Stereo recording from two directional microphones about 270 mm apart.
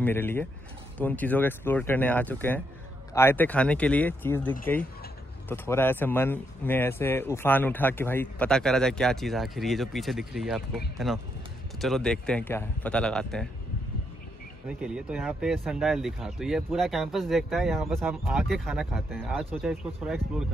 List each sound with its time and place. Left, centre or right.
0.0 s speech: centre
14.7 s speech: centre